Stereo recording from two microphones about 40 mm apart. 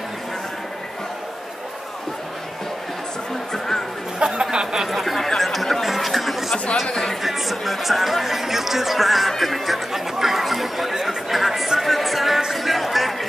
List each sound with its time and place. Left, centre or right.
3.5 s music: centre
4.2 s a sound: centre
4.7 s chatter: centre
6.5 s chatter: left
6.9 s speech: centre
11.0 s a sound: centre
11.8 s music: centre